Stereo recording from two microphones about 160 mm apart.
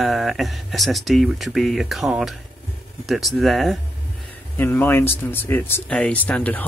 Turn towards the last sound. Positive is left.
turn(degrees=10)  # may be behind; listen again after turning